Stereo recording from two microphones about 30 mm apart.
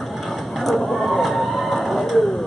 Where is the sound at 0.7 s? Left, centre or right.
Centre.